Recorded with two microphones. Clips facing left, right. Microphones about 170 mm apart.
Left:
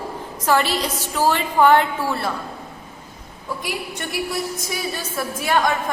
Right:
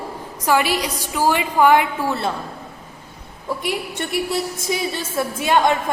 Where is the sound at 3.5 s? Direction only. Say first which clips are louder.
Right 4 dB; 25° right (ahead or behind).